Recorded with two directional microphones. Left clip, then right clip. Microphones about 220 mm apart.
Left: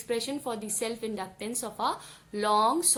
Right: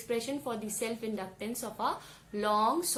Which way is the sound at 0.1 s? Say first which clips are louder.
Left 3 dB; 30° left (ahead or behind).